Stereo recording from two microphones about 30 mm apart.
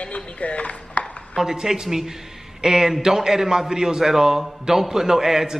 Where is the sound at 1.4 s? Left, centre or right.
Centre.